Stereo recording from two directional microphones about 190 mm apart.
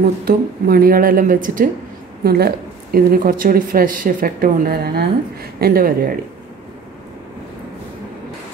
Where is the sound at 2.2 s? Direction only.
55° right (ahead or behind).